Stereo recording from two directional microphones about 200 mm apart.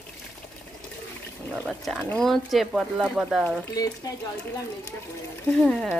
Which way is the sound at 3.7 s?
20° left (ahead or behind).